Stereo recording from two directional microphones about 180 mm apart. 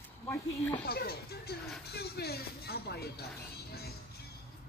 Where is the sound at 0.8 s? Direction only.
60° left (ahead or behind).